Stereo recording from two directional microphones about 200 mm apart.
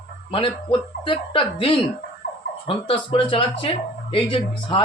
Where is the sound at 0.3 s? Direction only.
25° left (ahead or behind).